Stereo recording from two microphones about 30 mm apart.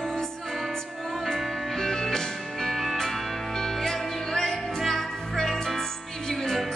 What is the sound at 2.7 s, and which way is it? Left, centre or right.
Music, centre.